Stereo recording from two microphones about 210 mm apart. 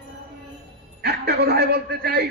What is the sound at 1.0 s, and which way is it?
Speech, 50° right (ahead or behind).